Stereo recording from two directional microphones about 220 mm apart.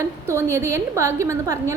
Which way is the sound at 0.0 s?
10° right (ahead or behind).